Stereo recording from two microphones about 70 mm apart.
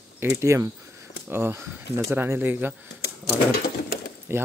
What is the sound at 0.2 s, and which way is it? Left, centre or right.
Speech, right.